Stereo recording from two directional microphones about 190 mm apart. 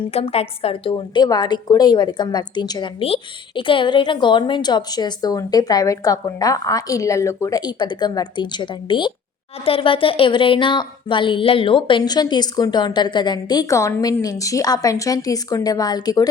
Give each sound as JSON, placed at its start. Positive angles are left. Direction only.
{"t": 0.1, "sound": "a woman's voice", "side_deg": 30}